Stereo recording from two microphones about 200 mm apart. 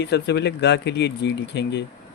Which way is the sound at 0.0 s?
60° left (ahead or behind).